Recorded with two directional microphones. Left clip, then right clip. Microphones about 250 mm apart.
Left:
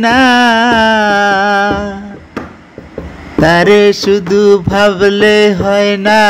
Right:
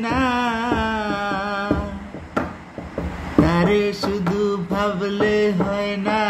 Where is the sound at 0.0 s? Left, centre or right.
Left.